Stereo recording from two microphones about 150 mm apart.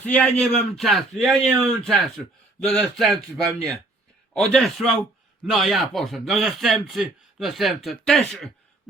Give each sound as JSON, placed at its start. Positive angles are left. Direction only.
{"t": 0.0, "sound": "a man's voice", "side_deg": 10}